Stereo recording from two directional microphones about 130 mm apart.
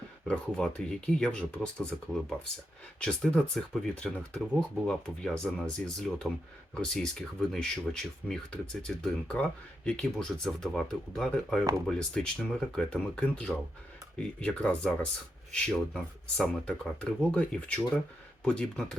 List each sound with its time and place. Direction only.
0.3 s speech: 10° left (ahead or behind)